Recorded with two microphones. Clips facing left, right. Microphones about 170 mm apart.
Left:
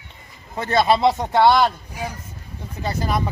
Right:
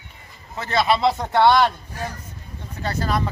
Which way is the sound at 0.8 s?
25° left (ahead or behind).